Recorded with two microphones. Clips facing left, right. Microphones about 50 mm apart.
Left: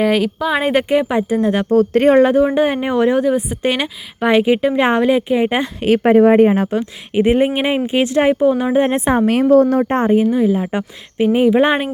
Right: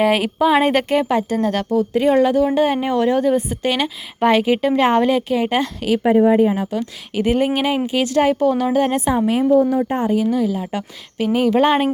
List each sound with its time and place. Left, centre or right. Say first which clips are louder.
0.0 s speech: even; centre
0.6 s speech: left 1 dB; centre
1.7 s speech: left 6 dB; left
2.0 s a woman's voice: left 2 dB; left; by 3.6 s centre
3.6 s a woman's voice: left 2 dB; left
3.8 s speech: even; centre
5.3 s a woman's voice: left 2 dB; left
6.0 s a woman's voice: left 3 dB; left
6.7 s a woman's voice: left 4 dB; left
9.1 s a woman's voice: left 4 dB; left
10.1 s a woman's voice: left 4 dB; left